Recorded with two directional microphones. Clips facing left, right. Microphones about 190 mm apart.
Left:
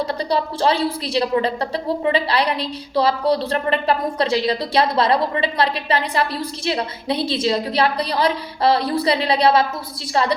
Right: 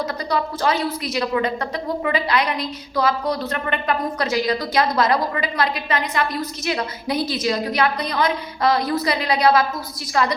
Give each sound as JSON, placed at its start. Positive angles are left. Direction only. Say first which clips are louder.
{"t": 0.0, "sound": "a woman's voice", "louder": "left 2 dB", "side_deg": 30}